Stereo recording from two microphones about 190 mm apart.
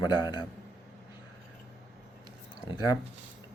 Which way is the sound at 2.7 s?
20° left (ahead or behind).